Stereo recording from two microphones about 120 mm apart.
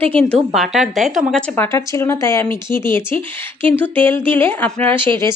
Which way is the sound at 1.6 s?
25° left (ahead or behind).